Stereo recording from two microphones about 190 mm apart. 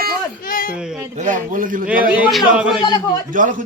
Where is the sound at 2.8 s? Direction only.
25° left (ahead or behind).